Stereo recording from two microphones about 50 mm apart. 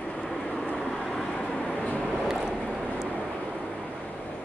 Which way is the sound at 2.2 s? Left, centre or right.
Centre.